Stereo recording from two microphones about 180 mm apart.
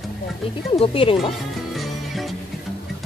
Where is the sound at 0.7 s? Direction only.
30° left (ahead or behind).